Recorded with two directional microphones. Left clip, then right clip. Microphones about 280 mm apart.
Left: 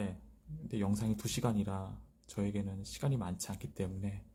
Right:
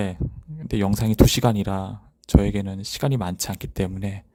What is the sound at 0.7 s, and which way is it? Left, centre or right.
Speech, right.